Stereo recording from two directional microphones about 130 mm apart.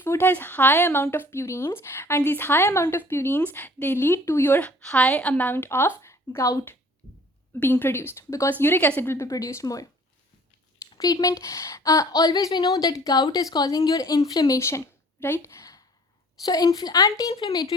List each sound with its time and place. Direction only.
0.0 s speech: 15° left (ahead or behind)
7.6 s a woman's voice: 15° left (ahead or behind)
11.0 s a woman's voice: 25° left (ahead or behind)